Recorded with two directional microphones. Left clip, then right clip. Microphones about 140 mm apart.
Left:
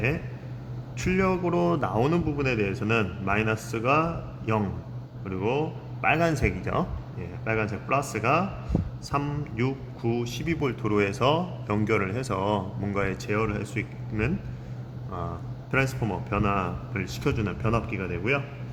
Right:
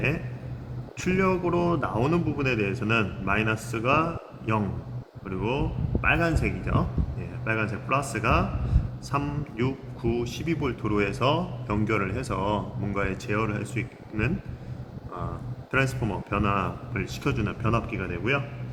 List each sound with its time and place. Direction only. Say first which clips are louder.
0.9 s a man's voice: right 1 dB; 35° left (ahead or behind); by 6.8 s 50° left (ahead or behind)
7.4 s a man's voice: even; 35° left (ahead or behind)
15.7 s a man's voice: even; 30° left (ahead or behind)